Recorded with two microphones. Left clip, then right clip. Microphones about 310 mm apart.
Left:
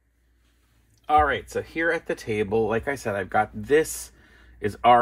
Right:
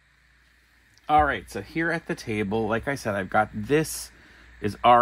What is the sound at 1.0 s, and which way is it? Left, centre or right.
Speech, right.